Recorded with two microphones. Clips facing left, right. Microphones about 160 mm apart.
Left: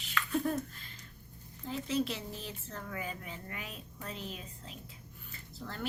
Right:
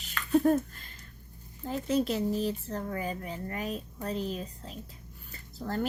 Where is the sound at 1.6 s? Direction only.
45° right (ahead or behind).